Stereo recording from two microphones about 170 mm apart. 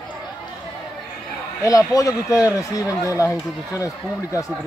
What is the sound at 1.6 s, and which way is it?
Speech, 20° left (ahead or behind).